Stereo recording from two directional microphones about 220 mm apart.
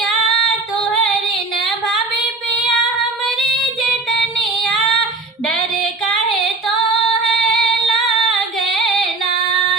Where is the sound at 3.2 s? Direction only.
Centre (ahead or behind).